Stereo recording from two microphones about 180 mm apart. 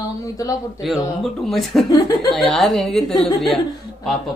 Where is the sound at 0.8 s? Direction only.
Centre (ahead or behind).